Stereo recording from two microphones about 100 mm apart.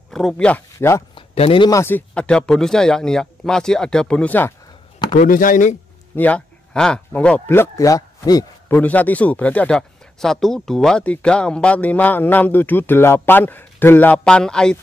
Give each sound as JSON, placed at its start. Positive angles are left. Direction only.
{"t": 0.1, "sound": "speech", "side_deg": 0}
{"t": 0.7, "sound": "speech", "side_deg": 30}
{"t": 1.1, "sound": "speech", "side_deg": 70}
{"t": 1.7, "sound": "speech", "side_deg": 25}
{"t": 2.1, "sound": "speech", "side_deg": 10}
{"t": 6.1, "sound": "a man's voice", "side_deg": 15}
{"t": 8.6, "sound": "speech", "side_deg": 20}
{"t": 14.2, "sound": "speech", "side_deg": 10}